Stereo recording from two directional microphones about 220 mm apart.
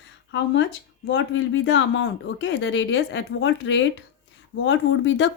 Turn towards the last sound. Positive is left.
turn(degrees=55)  # may be behind; listen again after turning